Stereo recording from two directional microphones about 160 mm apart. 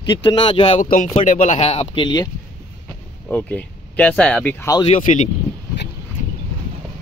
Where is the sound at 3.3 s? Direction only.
10° left (ahead or behind).